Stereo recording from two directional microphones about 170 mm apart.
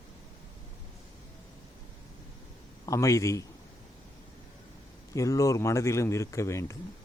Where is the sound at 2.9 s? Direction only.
20° left (ahead or behind).